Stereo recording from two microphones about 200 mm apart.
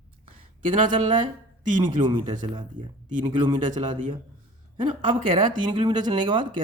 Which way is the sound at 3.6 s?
40° right (ahead or behind).